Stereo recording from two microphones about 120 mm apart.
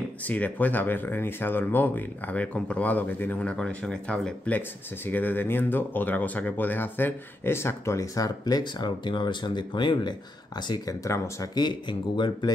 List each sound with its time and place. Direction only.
0.3 s speech: 15° left (ahead or behind); by 10.1 s 40° left (ahead or behind)
10.7 s speech: 25° left (ahead or behind)
11.6 s speech: 40° left (ahead or behind)